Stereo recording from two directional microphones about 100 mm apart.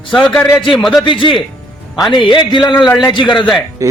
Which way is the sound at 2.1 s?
50° left (ahead or behind).